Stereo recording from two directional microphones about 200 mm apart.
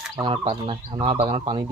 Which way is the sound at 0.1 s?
25° right (ahead or behind).